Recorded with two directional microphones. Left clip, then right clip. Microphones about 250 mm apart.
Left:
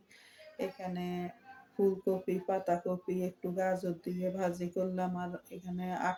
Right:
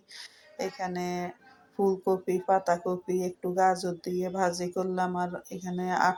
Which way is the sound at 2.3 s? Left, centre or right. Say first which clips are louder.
Right 9 dB; centre.